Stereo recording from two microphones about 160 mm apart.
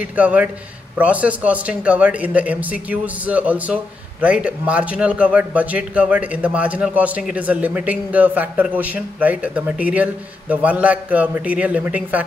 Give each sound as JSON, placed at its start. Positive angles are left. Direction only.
{"t": 0.0, "sound": "speech", "side_deg": -10}